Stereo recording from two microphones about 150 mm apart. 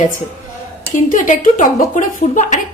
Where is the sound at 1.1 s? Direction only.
60° left (ahead or behind).